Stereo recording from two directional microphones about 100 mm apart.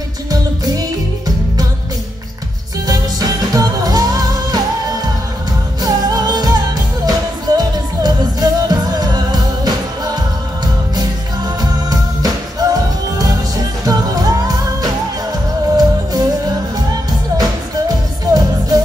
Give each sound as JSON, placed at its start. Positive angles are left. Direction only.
{"t": 0.3, "sound": "music", "side_deg": -40}
{"t": 2.9, "sound": "music", "side_deg": -40}
{"t": 5.8, "sound": "music", "side_deg": -40}
{"t": 17.4, "sound": "music", "side_deg": -40}